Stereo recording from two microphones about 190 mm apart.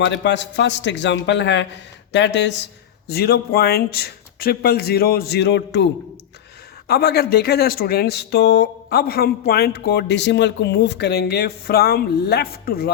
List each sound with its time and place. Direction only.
0.0 s a man's voice: 70° left (ahead or behind)
3.1 s speech: 55° left (ahead or behind)